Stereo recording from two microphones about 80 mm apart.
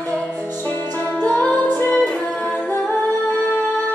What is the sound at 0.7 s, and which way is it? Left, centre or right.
Music, left.